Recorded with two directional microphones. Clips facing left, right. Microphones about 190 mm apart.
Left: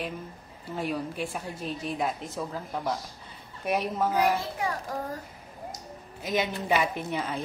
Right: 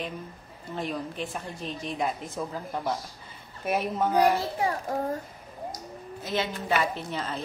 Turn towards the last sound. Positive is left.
turn(degrees=10)  # may be behind; listen again after turning